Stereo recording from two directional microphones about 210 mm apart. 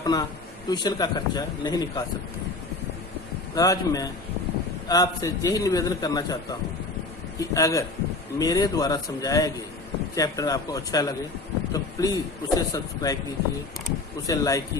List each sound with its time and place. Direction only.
0.0 s speech: 20° left (ahead or behind)
3.5 s a man's voice: 15° left (ahead or behind)
14.3 s a man's voice: 15° left (ahead or behind)